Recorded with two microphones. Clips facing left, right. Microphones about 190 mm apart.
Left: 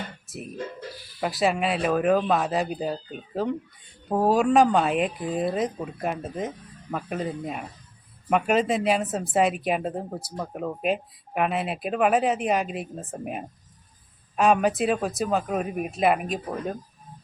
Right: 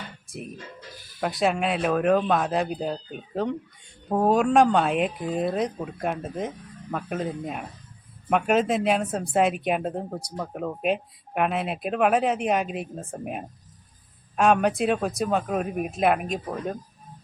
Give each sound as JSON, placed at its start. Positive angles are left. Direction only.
{"t": 1.2, "sound": "speech", "side_deg": 0}